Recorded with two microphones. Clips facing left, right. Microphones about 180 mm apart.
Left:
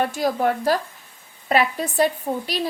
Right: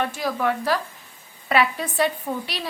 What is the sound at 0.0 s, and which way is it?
A woman's voice, 35° left (ahead or behind).